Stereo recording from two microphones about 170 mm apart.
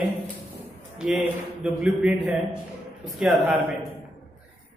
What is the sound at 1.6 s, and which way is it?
Speech, 5° right (ahead or behind).